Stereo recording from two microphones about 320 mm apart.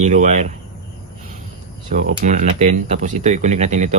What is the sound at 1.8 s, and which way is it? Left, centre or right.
Speech, right.